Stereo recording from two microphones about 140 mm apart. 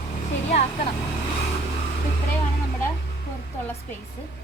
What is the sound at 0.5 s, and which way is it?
Vehicle, 50° left (ahead or behind).